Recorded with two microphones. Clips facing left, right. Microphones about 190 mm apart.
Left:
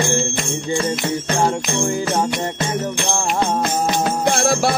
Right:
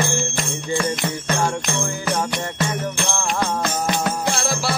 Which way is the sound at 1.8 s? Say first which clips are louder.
Left 4 dB; 20° left (ahead or behind).